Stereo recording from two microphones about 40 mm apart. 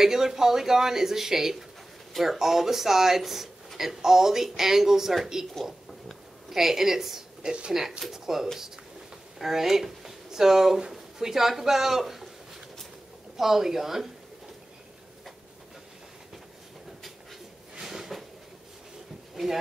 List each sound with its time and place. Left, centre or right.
0.0 s speech: centre
13.4 s speech: centre
17.7 s a sound: centre
19.3 s speech: centre